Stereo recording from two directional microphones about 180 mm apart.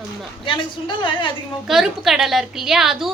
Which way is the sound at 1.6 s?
Centre (ahead or behind).